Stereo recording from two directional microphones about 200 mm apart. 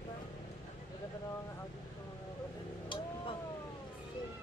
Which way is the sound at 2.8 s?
25° left (ahead or behind).